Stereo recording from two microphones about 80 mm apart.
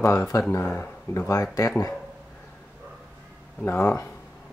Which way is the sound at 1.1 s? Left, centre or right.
Left.